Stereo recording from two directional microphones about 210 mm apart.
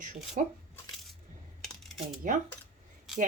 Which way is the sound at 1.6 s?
Centre (ahead or behind).